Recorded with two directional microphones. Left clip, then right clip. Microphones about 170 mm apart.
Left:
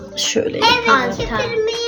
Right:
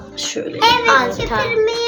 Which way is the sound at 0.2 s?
45° left (ahead or behind).